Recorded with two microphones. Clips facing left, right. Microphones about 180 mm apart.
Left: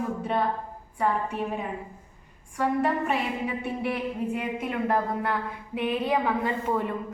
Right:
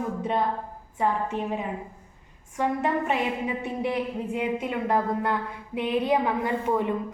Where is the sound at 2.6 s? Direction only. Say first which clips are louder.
Even; 20° right (ahead or behind).